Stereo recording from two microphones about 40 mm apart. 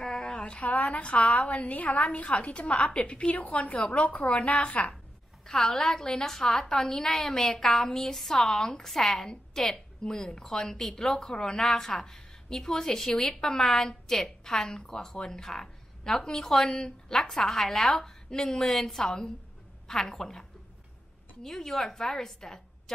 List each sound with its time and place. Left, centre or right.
0.0 s a sound: centre
0.6 s a woman's voice: left
5.5 s a woman's voice: centre